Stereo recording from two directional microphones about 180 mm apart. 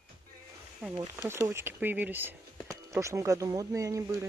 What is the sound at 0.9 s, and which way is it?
Speech, 15° right (ahead or behind).